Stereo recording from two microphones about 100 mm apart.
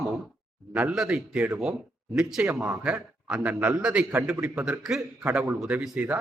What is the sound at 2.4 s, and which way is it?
Speech, 30° right (ahead or behind).